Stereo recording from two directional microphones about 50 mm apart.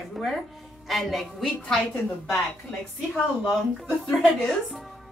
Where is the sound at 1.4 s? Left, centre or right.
Centre.